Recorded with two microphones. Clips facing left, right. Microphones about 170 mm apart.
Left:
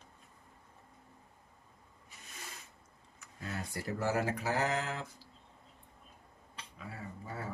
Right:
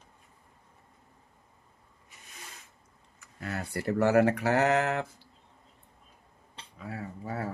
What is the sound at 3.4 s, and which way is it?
Speech, 65° right (ahead or behind).